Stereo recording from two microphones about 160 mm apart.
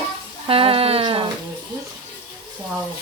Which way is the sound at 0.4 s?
35° right (ahead or behind).